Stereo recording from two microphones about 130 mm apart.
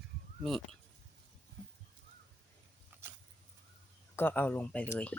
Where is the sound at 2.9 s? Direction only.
15° right (ahead or behind).